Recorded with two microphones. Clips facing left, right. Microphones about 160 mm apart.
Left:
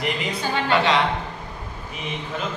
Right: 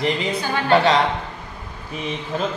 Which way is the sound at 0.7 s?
35° right (ahead or behind).